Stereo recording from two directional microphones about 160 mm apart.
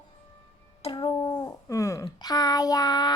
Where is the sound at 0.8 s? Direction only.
30° left (ahead or behind).